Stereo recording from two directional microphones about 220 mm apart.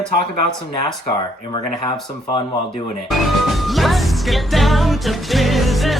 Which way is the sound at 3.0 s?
Centre (ahead or behind).